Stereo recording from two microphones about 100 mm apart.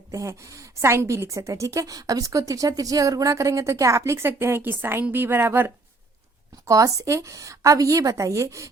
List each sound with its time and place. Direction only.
0.1 s a woman's voice: 30° right (ahead or behind)